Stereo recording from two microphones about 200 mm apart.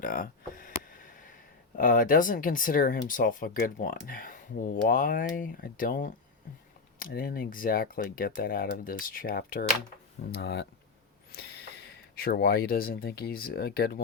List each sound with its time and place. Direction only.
0.0 s a sound: 45° left (ahead or behind)
1.8 s speech: 45° left (ahead or behind)
10.3 s speech: 60° left (ahead or behind)